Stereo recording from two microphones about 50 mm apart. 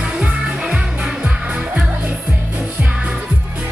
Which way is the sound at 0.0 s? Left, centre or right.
Right.